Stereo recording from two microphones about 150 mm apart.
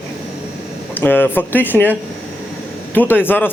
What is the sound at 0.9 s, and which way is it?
A man's voice, 15° left (ahead or behind).